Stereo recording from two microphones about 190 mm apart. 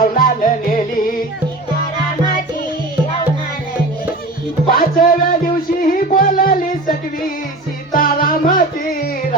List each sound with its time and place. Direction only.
0.0 s music: 50° left (ahead or behind)
4.7 s music: 50° left (ahead or behind)
7.9 s music: 50° left (ahead or behind)